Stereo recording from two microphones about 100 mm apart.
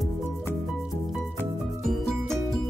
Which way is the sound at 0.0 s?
Centre (ahead or behind).